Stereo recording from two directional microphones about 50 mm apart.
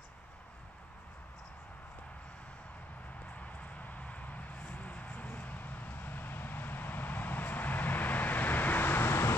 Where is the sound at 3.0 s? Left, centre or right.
Left.